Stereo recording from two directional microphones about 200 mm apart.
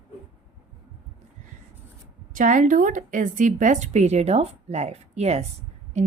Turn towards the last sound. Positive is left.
turn(degrees=-35)  # may be behind; listen again after turning